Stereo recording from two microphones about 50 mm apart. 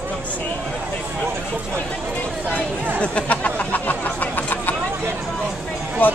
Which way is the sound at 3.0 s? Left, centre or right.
Left.